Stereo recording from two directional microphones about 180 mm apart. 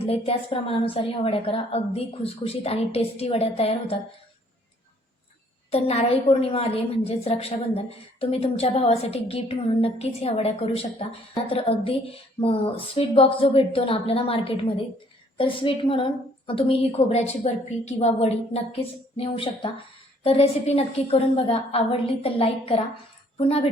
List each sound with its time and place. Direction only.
0.0 s a woman's voice: 35° left (ahead or behind)
5.7 s a woman's voice: 35° left (ahead or behind)